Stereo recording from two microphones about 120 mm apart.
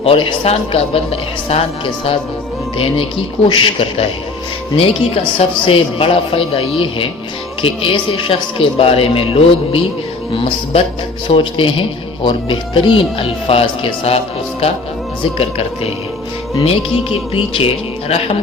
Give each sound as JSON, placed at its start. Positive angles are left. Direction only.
{"t": 0.0, "sound": "speech", "side_deg": 50}
{"t": 15.4, "sound": "speech", "side_deg": 55}